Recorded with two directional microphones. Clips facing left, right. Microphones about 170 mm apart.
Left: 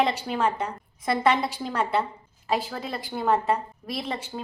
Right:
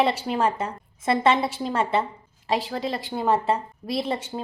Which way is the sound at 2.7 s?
30° right (ahead or behind).